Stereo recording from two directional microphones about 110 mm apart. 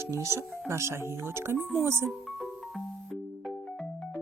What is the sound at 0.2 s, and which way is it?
Speech, 25° right (ahead or behind).